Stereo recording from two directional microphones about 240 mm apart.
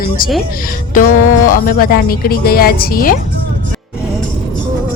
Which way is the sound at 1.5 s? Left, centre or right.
Left.